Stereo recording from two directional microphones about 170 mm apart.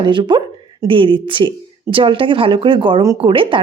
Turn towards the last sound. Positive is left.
turn(degrees=-30)  # may be behind; listen again after turning